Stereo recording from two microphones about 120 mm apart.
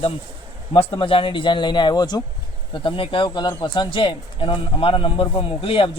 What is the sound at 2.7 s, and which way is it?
Speech, 45° left (ahead or behind).